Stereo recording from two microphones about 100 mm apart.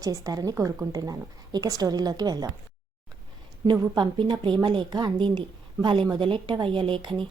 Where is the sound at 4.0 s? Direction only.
45° right (ahead or behind).